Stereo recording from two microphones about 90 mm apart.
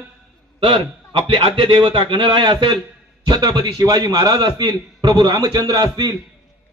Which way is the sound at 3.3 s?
50° right (ahead or behind).